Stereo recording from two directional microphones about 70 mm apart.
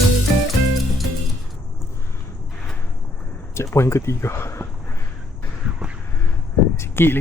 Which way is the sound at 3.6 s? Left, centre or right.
Left.